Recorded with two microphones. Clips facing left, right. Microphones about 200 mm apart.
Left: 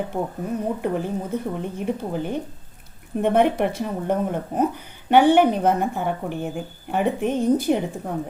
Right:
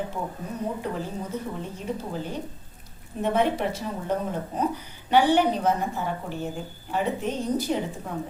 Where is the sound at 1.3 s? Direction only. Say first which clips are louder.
Left 5 dB; 55° left (ahead or behind).